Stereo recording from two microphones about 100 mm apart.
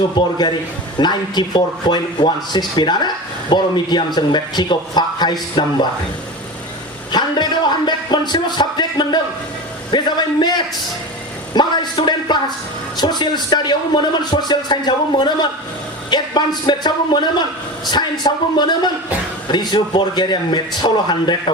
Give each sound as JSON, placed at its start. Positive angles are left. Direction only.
{"t": 0.2, "sound": "speech", "side_deg": 45}
{"t": 7.1, "sound": "a sound", "side_deg": 45}
{"t": 7.9, "sound": "music", "side_deg": 45}
{"t": 9.9, "sound": "speech", "side_deg": 45}